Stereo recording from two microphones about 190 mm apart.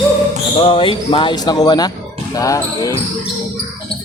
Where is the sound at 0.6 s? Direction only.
25° left (ahead or behind).